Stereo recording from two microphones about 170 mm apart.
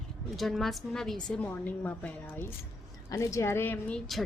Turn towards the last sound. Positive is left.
turn(degrees=10)  # may be behind; listen again after turning